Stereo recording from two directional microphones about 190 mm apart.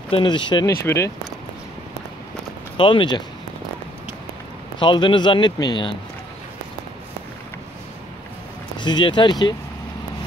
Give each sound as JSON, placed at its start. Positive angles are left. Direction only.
{"t": 0.1, "sound": "a man's voice", "side_deg": 25}
{"t": 2.8, "sound": "a man's voice", "side_deg": 25}
{"t": 4.7, "sound": "a man's voice", "side_deg": 25}
{"t": 8.7, "sound": "a man's voice", "side_deg": 25}